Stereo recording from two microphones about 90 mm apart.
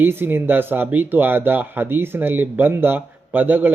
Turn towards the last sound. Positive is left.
turn(degrees=-20)  # may be behind; listen again after turning